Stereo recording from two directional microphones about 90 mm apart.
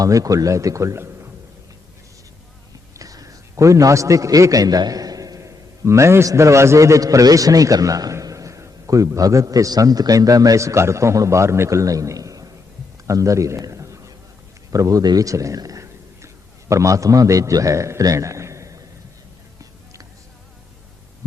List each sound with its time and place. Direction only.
0.0 s a man's voice: 40° right (ahead or behind)
3.0 s a man's voice: 40° right (ahead or behind)
13.1 s a sound: 35° right (ahead or behind)
14.7 s a man's voice: 40° right (ahead or behind)